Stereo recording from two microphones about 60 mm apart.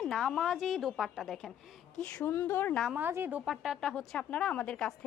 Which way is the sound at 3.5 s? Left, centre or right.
Centre.